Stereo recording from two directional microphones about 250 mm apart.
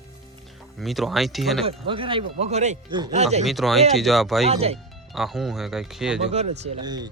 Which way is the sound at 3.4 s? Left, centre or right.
Centre.